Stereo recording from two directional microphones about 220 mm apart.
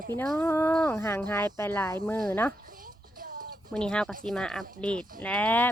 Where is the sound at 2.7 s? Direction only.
40° right (ahead or behind).